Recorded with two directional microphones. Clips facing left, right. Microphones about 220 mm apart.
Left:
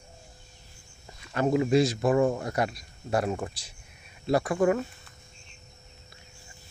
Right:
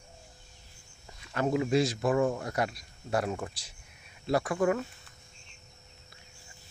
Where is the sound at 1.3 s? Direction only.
30° left (ahead or behind).